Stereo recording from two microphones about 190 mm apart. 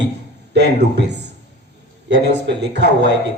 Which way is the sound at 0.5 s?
65° right (ahead or behind).